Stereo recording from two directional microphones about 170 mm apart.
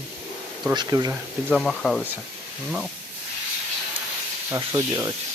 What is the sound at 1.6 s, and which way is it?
Speech, centre (ahead or behind).